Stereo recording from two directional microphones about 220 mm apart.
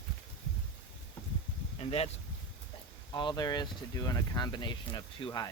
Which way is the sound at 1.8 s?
25° left (ahead or behind).